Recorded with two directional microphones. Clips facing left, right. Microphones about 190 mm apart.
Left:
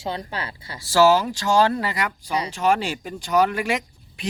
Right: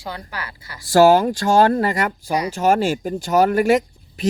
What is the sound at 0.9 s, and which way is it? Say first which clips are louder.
Speech: right 4 dB; 50° right (ahead or behind).